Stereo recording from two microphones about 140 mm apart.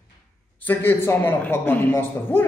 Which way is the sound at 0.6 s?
15° left (ahead or behind).